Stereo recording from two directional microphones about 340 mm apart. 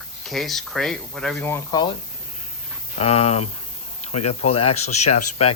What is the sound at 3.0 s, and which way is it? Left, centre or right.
Speech, centre.